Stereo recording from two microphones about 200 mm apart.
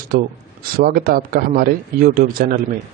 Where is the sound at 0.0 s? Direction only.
45° right (ahead or behind).